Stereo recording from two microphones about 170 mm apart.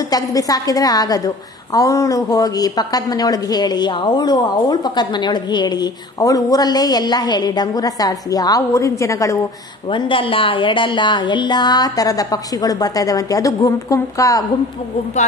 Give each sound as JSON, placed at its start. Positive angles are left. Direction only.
{"t": 0.1, "sound": "a woman's voice", "side_deg": 20}
{"t": 9.8, "sound": "a woman's voice", "side_deg": 30}